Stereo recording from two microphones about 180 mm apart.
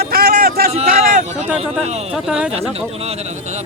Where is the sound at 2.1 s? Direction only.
5° right (ahead or behind).